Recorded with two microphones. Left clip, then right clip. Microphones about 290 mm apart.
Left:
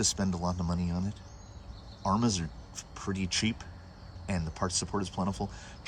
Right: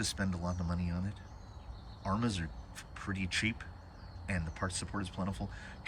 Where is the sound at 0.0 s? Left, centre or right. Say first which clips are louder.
Left 6 dB; centre.